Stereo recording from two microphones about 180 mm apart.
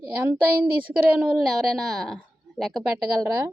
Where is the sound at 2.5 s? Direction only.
Centre (ahead or behind).